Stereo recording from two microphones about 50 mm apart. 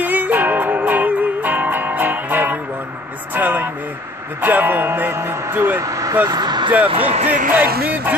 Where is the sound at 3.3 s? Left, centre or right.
Right.